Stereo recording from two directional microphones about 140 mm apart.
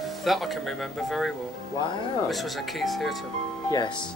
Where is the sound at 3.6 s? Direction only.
30° left (ahead or behind).